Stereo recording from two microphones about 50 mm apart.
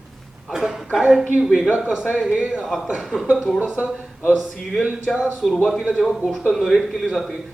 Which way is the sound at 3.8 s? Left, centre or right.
Centre.